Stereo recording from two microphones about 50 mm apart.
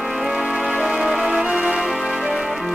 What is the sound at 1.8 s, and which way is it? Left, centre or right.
Music, centre.